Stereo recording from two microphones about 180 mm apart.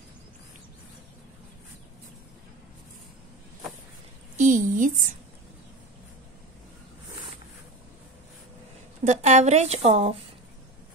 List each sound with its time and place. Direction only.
4.4 s a woman's voice: 45° right (ahead or behind)
9.0 s speech: 40° right (ahead or behind)